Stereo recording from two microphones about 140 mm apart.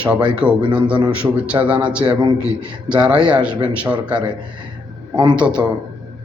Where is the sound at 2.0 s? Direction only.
30° right (ahead or behind).